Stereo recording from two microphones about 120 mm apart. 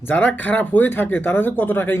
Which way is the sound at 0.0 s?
15° left (ahead or behind).